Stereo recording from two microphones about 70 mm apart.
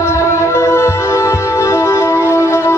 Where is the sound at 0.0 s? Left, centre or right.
Left.